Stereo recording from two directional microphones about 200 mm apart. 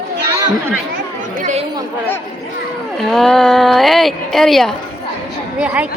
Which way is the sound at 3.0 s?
Centre (ahead or behind).